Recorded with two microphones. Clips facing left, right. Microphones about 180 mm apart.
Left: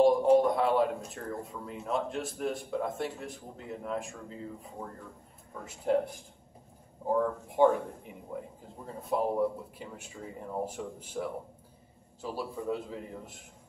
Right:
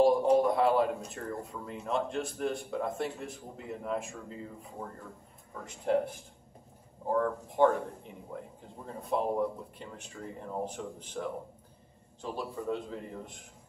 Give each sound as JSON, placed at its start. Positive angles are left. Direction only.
{"t": 0.0, "sound": "a man's voice", "side_deg": 0}
{"t": 5.9, "sound": "a man's voice", "side_deg": 5}
{"t": 7.1, "sound": "speech", "side_deg": 10}
{"t": 8.8, "sound": "a man's voice", "side_deg": 5}